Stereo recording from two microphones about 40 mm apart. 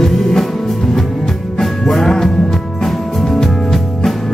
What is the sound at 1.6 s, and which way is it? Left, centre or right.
Music, centre.